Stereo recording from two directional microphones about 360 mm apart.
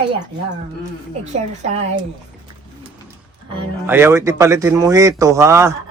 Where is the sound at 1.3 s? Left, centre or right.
Centre.